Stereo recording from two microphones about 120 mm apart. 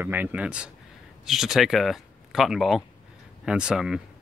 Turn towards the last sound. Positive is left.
turn(degrees=-5)  # may be behind; listen again after turning